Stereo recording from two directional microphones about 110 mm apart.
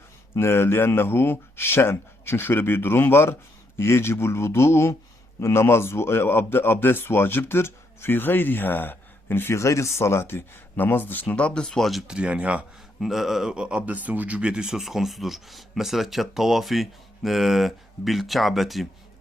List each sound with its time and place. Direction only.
0.3 s speech: 20° left (ahead or behind); by 18.9 s centre (ahead or behind)